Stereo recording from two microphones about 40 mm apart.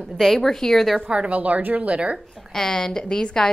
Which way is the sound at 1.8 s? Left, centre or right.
Right.